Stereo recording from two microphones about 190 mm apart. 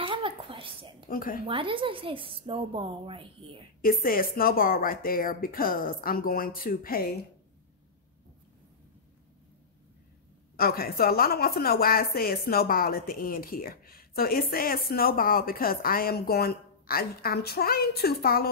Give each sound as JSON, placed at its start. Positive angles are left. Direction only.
{"t": 0.0, "sound": "a sound", "side_deg": -25}
{"t": 1.0, "sound": "speech", "side_deg": 50}
{"t": 1.5, "sound": "a woman's voice", "side_deg": -25}
{"t": 3.8, "sound": "a woman's voice", "side_deg": 50}
{"t": 10.5, "sound": "a woman's voice", "side_deg": 50}